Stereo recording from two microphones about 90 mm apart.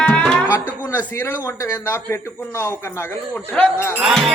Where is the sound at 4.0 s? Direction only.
5° right (ahead or behind).